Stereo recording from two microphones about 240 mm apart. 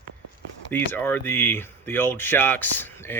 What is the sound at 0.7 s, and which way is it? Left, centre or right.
Speech, centre.